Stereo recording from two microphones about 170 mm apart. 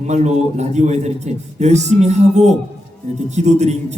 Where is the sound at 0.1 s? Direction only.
40° right (ahead or behind).